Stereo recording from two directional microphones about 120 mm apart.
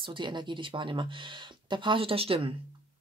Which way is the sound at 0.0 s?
40° right (ahead or behind).